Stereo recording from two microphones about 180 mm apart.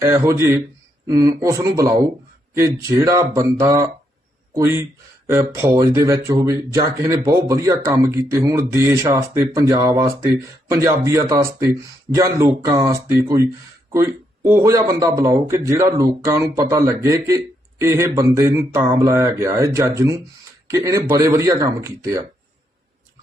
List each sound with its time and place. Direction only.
0.0 s speech: 15° right (ahead or behind)